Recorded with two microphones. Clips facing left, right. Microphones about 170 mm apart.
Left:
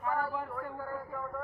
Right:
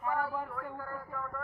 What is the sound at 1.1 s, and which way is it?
Speech, 10° left (ahead or behind).